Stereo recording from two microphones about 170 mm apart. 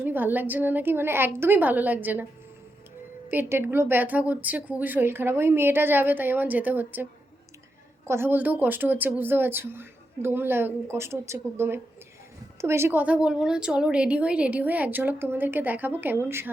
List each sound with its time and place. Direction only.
0.0 s speech: 10° right (ahead or behind)
3.2 s speech: 10° right (ahead or behind)